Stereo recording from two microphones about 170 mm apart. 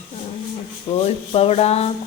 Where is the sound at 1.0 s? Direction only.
35° left (ahead or behind).